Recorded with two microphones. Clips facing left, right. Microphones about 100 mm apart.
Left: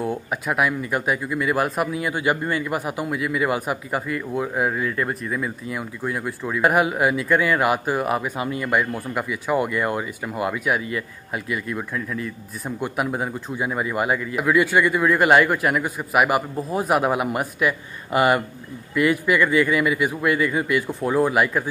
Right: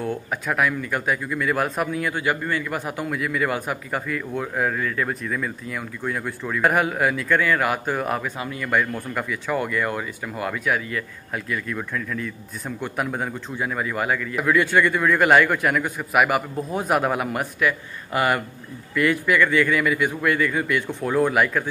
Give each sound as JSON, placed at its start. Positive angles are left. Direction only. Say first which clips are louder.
{"t": 0.0, "sound": "speech", "louder": "left 1 dB", "side_deg": 10}